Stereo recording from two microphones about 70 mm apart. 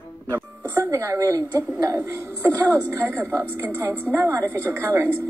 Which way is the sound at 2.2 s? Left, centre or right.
Right.